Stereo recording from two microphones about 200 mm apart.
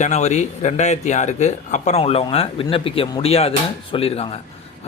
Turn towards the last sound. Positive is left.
turn(degrees=30)  # may be behind; listen again after turning